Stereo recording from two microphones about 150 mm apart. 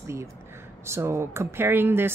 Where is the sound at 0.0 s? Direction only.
20° right (ahead or behind).